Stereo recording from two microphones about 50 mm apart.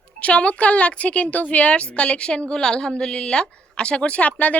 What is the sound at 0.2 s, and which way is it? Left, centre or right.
A woman's voice, left.